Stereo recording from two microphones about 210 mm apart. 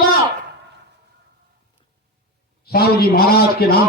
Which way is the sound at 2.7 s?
45° left (ahead or behind).